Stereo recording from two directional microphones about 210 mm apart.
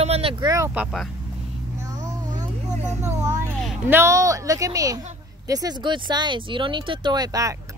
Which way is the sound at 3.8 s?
10° right (ahead or behind).